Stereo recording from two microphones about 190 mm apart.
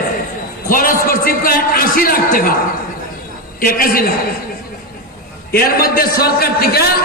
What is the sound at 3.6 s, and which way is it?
Speech, 50° left (ahead or behind).